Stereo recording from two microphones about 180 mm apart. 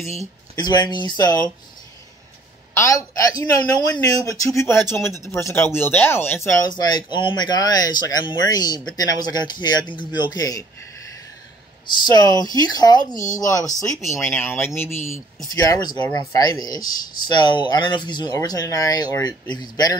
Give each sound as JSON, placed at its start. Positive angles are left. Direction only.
{"t": 0.6, "sound": "speech", "side_deg": 25}
{"t": 2.7, "sound": "speech", "side_deg": 15}
{"t": 6.7, "sound": "speech", "side_deg": 25}
{"t": 11.8, "sound": "speech", "side_deg": 25}